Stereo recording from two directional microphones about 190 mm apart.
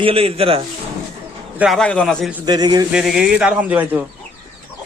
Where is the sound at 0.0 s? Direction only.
30° right (ahead or behind).